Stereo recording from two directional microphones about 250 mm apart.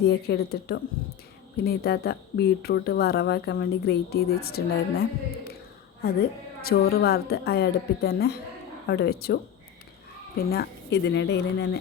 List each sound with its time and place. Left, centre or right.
0.0 s speech: left
6.6 s speech: left